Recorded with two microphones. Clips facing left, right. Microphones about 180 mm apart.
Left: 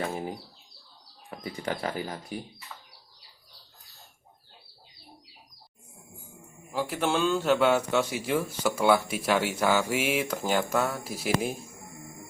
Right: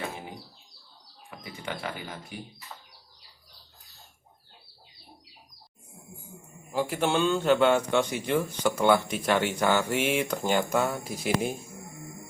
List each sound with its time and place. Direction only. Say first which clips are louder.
0.1 s a sound: left 7 dB; 40° left (ahead or behind)
1.3 s speech: left 4 dB; 40° left (ahead or behind)
6.7 s speech: right 1 dB; centre (ahead or behind)